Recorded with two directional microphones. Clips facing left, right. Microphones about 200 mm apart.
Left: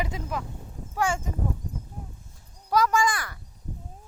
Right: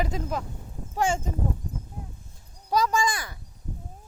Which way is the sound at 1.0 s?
20° right (ahead or behind).